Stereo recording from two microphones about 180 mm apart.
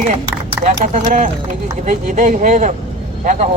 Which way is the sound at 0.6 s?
5° right (ahead or behind).